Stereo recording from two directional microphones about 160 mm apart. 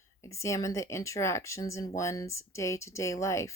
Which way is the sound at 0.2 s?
20° left (ahead or behind).